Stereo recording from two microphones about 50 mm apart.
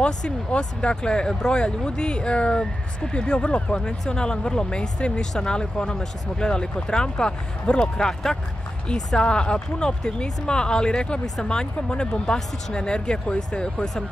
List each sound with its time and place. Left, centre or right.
0.0 s speech: centre